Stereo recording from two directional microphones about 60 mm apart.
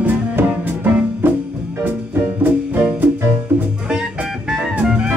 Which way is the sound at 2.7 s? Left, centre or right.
Right.